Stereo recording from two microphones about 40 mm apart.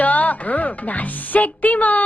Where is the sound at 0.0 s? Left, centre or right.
Left.